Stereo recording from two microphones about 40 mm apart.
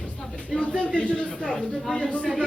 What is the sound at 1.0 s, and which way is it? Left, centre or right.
Speech, left.